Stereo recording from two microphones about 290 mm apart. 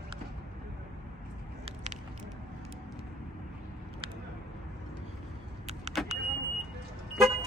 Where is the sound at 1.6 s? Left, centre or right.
Right.